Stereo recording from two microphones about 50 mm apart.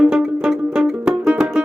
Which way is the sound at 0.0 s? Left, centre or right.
Centre.